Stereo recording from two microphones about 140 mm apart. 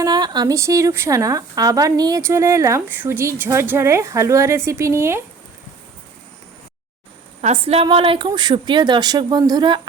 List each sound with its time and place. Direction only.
0.0 s speech: 30° right (ahead or behind)
7.4 s a woman's voice: 45° right (ahead or behind)